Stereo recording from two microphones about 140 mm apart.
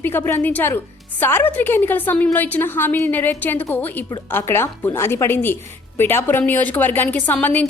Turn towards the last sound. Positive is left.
turn(degrees=10)  # may be behind; listen again after turning